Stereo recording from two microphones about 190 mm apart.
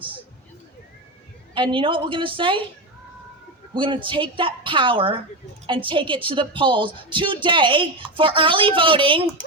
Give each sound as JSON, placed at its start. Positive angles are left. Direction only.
{"t": 1.5, "sound": "a woman's voice", "side_deg": -25}
{"t": 3.8, "sound": "a woman's voice", "side_deg": -25}